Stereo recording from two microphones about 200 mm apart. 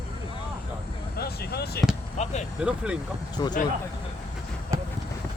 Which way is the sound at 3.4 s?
20° left (ahead or behind).